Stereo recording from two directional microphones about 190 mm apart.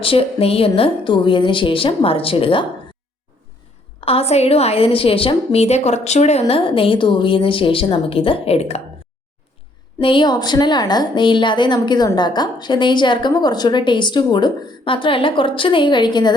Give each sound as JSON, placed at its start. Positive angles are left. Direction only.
{"t": 0.0, "sound": "a woman's voice", "side_deg": 30}
{"t": 4.0, "sound": "a woman's voice", "side_deg": 30}
{"t": 10.0, "sound": "a woman's voice", "side_deg": 25}